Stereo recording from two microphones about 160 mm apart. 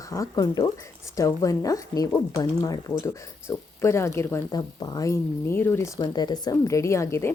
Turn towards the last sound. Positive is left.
turn(degrees=15)  # may be behind; listen again after turning